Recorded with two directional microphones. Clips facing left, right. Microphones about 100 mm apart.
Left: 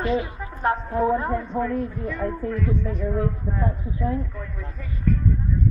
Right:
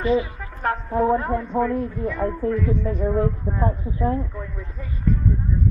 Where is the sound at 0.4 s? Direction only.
15° left (ahead or behind).